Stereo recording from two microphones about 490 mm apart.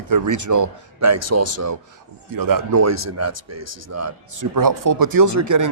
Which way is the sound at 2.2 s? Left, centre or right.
Right.